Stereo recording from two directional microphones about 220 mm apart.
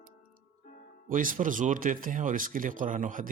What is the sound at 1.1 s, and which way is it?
Speech, 40° right (ahead or behind).